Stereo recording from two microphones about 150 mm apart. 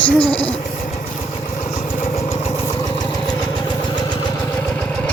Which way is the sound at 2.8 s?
25° left (ahead or behind).